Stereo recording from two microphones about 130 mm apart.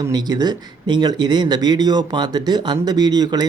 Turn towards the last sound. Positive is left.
turn(degrees=-30)  # may be behind; listen again after turning